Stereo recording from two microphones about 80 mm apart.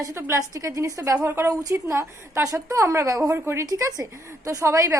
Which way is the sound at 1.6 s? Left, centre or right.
Right.